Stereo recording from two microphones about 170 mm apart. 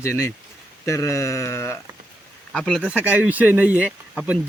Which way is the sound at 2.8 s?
10° right (ahead or behind).